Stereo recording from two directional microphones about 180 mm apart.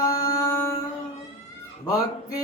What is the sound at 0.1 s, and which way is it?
Music, 20° left (ahead or behind).